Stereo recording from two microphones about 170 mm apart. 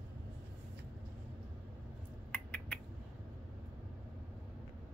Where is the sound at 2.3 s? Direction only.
5° left (ahead or behind).